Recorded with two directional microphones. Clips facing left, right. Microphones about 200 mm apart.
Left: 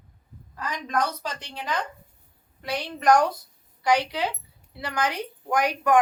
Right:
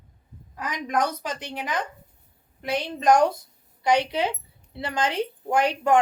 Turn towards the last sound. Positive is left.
turn(degrees=-25)  # may be behind; listen again after turning